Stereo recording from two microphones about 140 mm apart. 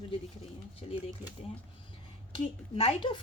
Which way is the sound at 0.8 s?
45° left (ahead or behind).